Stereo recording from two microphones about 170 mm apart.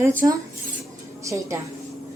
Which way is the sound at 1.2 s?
15° right (ahead or behind).